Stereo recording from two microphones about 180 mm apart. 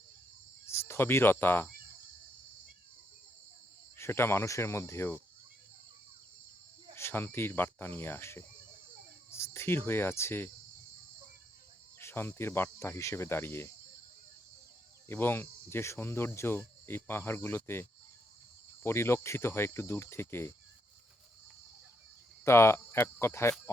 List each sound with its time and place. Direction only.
0.6 s cricket: 15° left (ahead or behind)
3.9 s speech: 15° left (ahead or behind)
6.9 s speech: 10° left (ahead or behind)
11.9 s speech: 10° left (ahead or behind)
15.1 s speech: 10° left (ahead or behind)
22.4 s speech: 15° left (ahead or behind)